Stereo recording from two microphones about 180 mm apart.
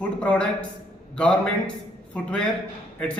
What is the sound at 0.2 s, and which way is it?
A man's voice, 5° left (ahead or behind).